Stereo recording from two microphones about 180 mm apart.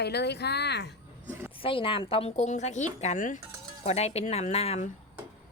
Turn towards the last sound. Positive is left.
turn(degrees=40)  # may be behind; listen again after turning